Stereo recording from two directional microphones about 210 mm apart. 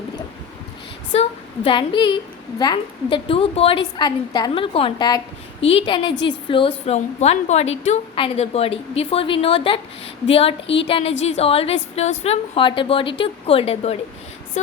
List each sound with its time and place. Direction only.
1.1 s a woman's voice: 25° left (ahead or behind)